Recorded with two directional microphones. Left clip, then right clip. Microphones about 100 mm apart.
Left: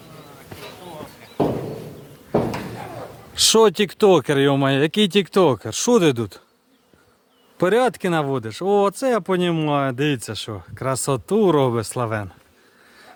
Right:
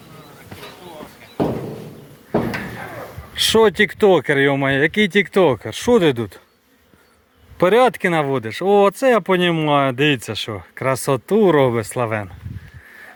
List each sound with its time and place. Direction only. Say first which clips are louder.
3.3 s speech: right 1 dB; 45° left (ahead or behind)
7.6 s speech: right 4 dB; 20° left (ahead or behind)